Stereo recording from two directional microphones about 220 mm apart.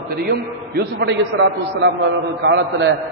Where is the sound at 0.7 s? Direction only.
55° right (ahead or behind).